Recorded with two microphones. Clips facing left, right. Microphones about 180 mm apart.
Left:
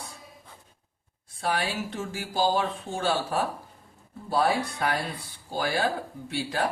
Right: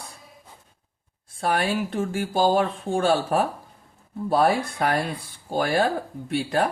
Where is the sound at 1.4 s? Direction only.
55° right (ahead or behind).